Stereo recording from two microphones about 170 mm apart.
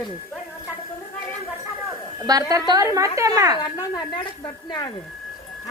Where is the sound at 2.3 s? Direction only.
20° right (ahead or behind).